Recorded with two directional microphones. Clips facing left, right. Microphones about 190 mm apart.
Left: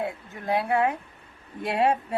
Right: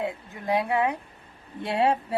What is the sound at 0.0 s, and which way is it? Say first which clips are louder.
Speech: even; 15° right (ahead or behind).